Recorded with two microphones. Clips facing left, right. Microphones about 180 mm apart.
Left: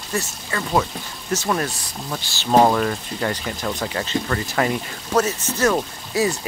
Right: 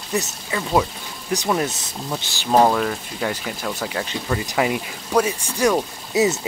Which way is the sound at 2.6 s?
Centre (ahead or behind).